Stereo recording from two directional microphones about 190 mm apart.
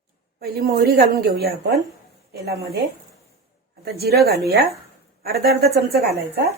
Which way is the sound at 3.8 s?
55° right (ahead or behind).